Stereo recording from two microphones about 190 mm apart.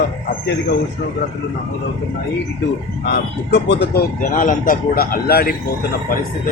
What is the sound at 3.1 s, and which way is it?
Speech, 60° left (ahead or behind).